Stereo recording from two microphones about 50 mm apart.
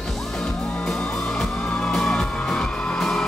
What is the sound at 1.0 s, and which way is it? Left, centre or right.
Music, centre.